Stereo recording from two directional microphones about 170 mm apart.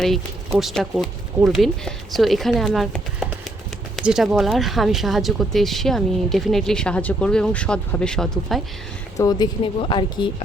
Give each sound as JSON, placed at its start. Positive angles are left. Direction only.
{"t": 0.6, "sound": "speech", "side_deg": 0}
{"t": 9.1, "sound": "a woman's voice", "side_deg": 20}